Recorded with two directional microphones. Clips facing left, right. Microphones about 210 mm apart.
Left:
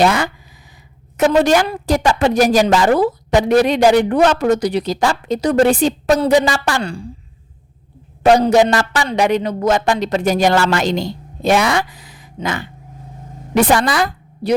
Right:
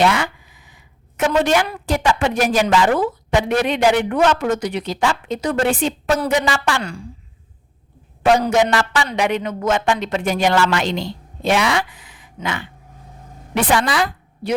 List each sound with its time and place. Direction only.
0.0 s a woman's voice: 40° left (ahead or behind)
8.2 s a woman's voice: 35° left (ahead or behind)